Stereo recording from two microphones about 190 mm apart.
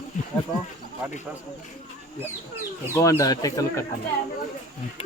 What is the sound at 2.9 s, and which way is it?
Speech, 15° left (ahead or behind).